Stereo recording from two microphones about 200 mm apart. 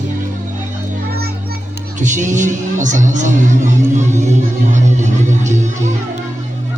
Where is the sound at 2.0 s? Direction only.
40° right (ahead or behind).